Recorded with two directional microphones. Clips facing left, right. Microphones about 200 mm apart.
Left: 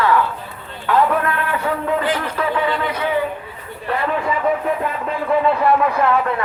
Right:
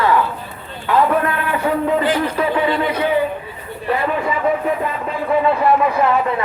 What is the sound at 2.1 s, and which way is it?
Speech, 15° right (ahead or behind).